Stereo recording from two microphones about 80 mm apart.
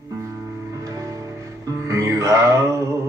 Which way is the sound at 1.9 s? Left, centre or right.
Right.